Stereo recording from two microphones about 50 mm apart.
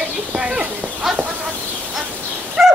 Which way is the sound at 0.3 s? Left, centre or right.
Right.